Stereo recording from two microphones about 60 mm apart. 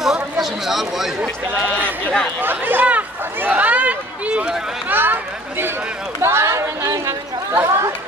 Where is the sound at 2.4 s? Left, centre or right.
Right.